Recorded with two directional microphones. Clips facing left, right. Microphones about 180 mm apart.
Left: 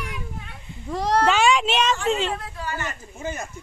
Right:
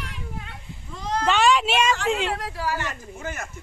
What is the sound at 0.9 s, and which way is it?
Speech, 70° left (ahead or behind).